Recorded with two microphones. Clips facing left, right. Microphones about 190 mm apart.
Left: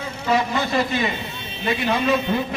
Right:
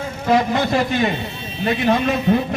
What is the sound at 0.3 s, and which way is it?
Speech, 50° right (ahead or behind).